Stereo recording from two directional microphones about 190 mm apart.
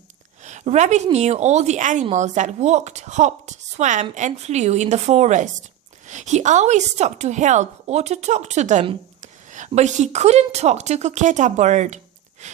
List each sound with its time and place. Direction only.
0.4 s a woman's voice: 35° right (ahead or behind)